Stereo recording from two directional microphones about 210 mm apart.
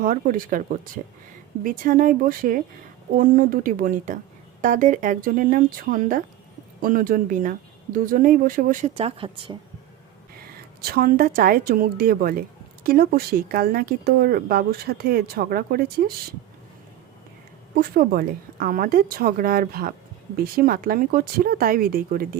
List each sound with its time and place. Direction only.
0.0 s speech: 40° right (ahead or behind); by 9.6 s 25° right (ahead or behind)
10.3 s a woman's voice: 45° right (ahead or behind)
17.7 s a woman's voice: 45° right (ahead or behind)